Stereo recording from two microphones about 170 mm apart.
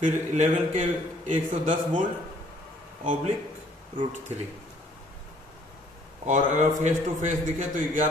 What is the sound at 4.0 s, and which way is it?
Speech, 40° right (ahead or behind).